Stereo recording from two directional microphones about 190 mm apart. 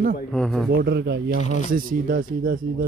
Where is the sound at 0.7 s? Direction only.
65° right (ahead or behind).